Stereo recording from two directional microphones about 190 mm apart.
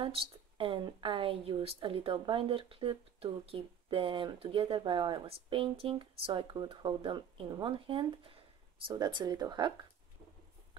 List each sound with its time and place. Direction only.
0.0 s a woman's voice: 30° right (ahead or behind)